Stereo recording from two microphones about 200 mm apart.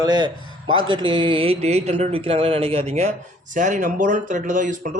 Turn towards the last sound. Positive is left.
turn(degrees=-40)  # may be behind; listen again after turning